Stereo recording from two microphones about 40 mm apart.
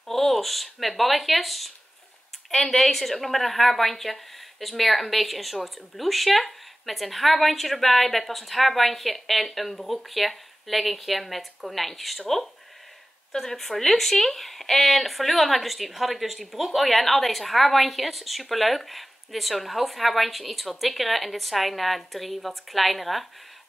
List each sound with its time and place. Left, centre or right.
0.0 s a woman's voice: centre